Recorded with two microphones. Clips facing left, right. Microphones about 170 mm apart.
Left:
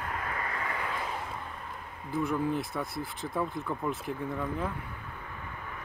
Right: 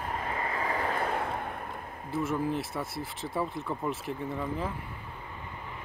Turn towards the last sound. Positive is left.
turn(degrees=0)  # may be behind; listen again after turning